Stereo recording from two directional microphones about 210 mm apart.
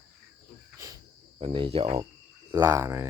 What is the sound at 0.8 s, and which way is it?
Cricket, 15° right (ahead or behind).